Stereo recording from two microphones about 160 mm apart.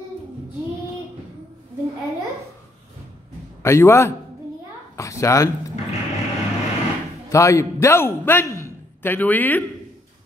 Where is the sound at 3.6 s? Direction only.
15° left (ahead or behind).